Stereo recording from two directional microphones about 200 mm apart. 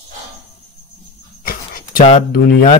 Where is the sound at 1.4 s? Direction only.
45° left (ahead or behind).